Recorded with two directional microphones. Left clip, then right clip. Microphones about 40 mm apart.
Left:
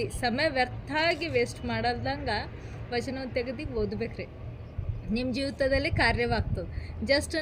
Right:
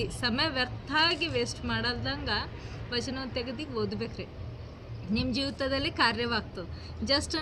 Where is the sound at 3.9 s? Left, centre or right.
Right.